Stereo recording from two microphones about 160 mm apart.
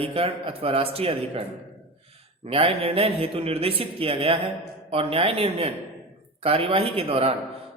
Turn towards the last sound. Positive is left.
turn(degrees=-35)  # may be behind; listen again after turning